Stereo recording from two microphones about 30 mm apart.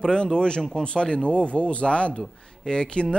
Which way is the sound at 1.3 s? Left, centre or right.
Left.